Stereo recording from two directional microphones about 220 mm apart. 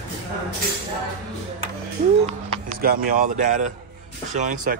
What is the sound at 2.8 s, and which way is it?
Speech, 40° right (ahead or behind).